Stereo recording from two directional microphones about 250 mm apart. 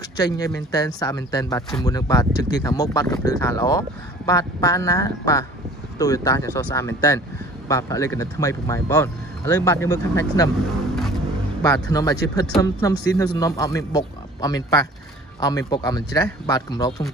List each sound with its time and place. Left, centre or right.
0.2 s speech: centre
11.6 s speech: centre